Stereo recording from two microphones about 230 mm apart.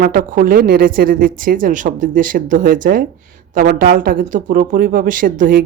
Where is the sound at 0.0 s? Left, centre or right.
Right.